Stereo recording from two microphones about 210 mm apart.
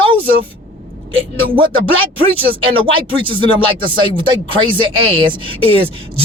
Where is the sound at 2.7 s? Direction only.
25° right (ahead or behind).